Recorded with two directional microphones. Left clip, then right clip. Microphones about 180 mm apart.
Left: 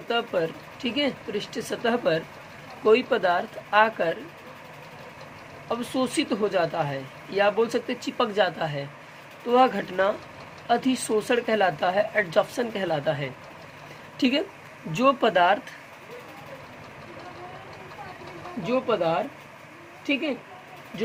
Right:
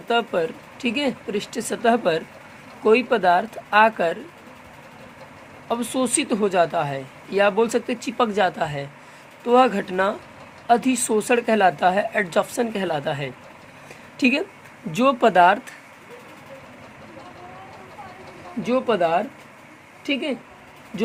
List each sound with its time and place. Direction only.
0.1 s speech: 40° right (ahead or behind)
5.6 s speech: 40° right (ahead or behind)
18.6 s speech: 60° right (ahead or behind)